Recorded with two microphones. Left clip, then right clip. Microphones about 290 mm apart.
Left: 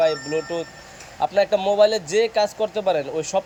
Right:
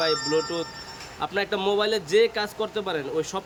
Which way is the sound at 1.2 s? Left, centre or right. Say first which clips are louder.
Left 7 dB; centre.